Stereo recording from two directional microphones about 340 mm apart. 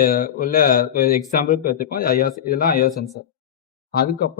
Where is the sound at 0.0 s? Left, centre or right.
Left.